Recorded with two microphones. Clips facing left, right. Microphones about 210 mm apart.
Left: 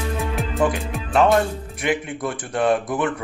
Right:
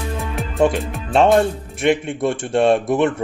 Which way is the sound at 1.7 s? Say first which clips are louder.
Right 6 dB; 25° right (ahead or behind).